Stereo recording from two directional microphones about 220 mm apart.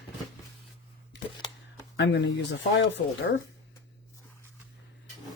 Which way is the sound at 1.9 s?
50° left (ahead or behind).